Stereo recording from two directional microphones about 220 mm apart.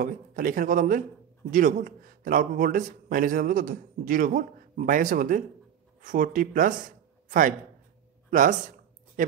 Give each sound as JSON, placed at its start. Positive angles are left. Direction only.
{"t": 0.0, "sound": "a man's voice", "side_deg": -40}